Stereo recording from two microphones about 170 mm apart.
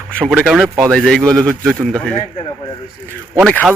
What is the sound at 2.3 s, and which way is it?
Speech, 30° left (ahead or behind).